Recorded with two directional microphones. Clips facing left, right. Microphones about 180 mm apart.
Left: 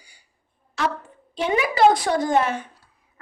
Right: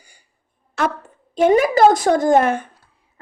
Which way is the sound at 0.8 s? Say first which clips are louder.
Right 4 dB; 50° right (ahead or behind).